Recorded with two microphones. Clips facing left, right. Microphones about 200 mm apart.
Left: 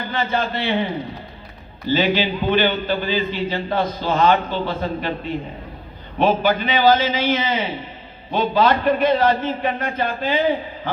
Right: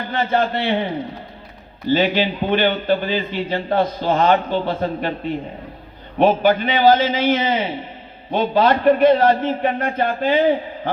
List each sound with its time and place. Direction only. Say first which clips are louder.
0.3 s a man's voice: right 5 dB; 55° right (ahead or behind)
1.9 s a man's voice: right 1 dB; 55° right (ahead or behind)
6.1 s a man's voice: right 3 dB; 55° right (ahead or behind)